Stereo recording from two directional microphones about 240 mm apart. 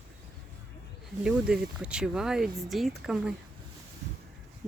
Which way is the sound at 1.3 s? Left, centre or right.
Centre.